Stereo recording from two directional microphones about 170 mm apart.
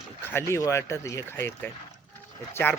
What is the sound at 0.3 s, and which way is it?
Speech, 15° left (ahead or behind).